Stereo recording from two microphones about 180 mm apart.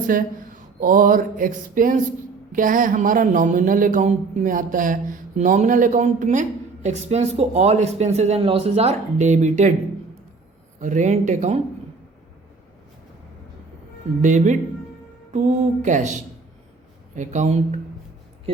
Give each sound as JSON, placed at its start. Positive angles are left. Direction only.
{"t": 0.1, "sound": "a sound", "side_deg": -50}
{"t": 2.5, "sound": "speech", "side_deg": -50}
{"t": 10.8, "sound": "speech", "side_deg": -45}
{"t": 14.2, "sound": "speech", "side_deg": -40}